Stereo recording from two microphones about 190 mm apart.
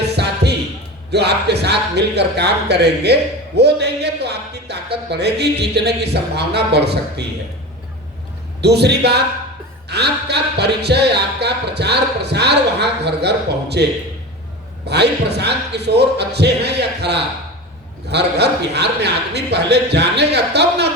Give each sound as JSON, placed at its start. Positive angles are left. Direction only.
{"t": 0.2, "sound": "a sound", "side_deg": -60}
{"t": 1.1, "sound": "speech", "side_deg": -60}
{"t": 8.6, "sound": "speech", "side_deg": -60}
{"t": 14.8, "sound": "speech", "side_deg": -60}